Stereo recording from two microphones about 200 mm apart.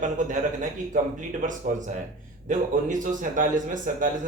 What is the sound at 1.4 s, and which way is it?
Speech, 40° right (ahead or behind).